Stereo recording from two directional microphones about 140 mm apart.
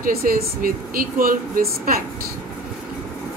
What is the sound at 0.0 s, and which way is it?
Speech, 85° right.